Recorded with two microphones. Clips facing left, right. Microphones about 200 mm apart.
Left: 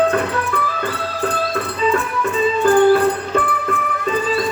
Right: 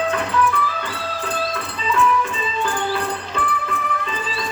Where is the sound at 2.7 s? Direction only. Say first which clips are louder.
Left 15 dB; 50° left (ahead or behind).